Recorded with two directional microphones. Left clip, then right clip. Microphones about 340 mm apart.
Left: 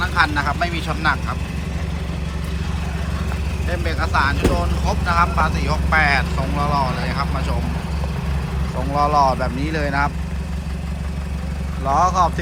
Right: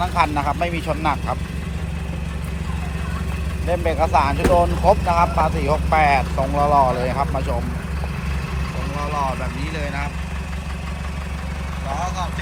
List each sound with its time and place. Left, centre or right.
0.2 s speech: centre
3.8 s speech: centre
9.0 s speech: centre
11.9 s speech: centre